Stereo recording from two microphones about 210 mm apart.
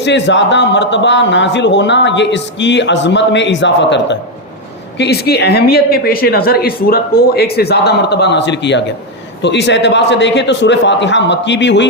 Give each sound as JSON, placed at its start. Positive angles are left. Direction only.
{"t": 0.0, "sound": "a man's voice", "side_deg": 55}